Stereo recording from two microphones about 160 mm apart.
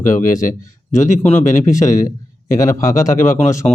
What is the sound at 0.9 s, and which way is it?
A man's voice, 15° left (ahead or behind).